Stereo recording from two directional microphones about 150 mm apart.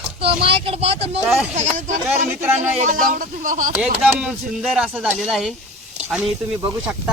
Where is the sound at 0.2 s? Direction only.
40° right (ahead or behind).